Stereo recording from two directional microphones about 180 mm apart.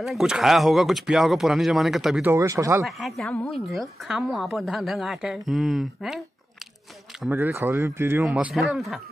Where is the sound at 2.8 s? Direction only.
Centre (ahead or behind).